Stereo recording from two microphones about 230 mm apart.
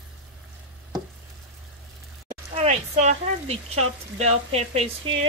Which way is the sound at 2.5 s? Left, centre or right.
Right.